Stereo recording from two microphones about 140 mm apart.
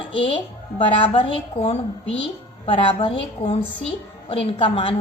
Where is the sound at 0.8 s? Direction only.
40° left (ahead or behind).